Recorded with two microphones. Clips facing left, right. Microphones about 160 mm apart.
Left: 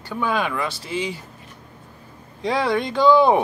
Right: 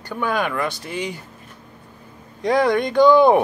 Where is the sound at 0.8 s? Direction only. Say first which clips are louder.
Left 1 dB; 50° right (ahead or behind).